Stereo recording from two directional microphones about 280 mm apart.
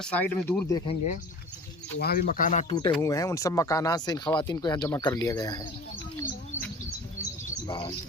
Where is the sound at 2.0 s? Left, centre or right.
Left; by 5.7 s centre.